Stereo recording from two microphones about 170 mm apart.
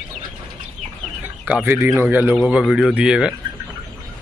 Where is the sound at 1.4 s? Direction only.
10° right (ahead or behind).